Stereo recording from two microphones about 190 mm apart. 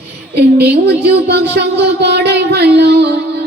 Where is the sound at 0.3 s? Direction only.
60° right (ahead or behind).